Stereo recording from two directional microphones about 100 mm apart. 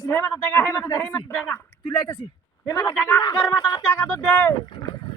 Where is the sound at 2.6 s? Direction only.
30° left (ahead or behind).